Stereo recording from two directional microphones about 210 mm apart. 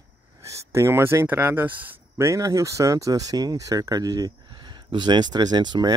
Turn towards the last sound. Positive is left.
turn(degrees=-20)  # may be behind; listen again after turning